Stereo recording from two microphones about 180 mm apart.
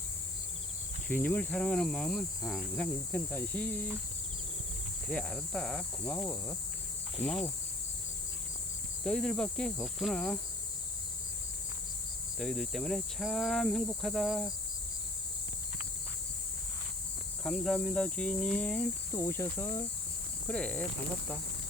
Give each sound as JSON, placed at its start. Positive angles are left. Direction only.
{"t": 1.0, "sound": "speech", "side_deg": 10}
{"t": 2.7, "sound": "speech", "side_deg": 10}
{"t": 5.0, "sound": "speech", "side_deg": 5}
{"t": 9.0, "sound": "speech", "side_deg": 5}
{"t": 12.4, "sound": "speech", "side_deg": 0}
{"t": 17.4, "sound": "speech", "side_deg": 5}